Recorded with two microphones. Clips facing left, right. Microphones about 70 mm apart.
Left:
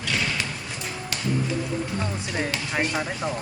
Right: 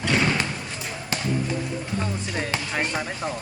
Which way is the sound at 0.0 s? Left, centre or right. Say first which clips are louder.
Right 5 dB; right.